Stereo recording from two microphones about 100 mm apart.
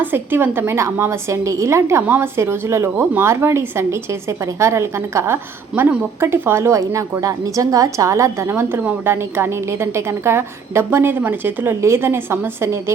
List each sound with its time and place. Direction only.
0.0 s a woman's voice: 20° right (ahead or behind)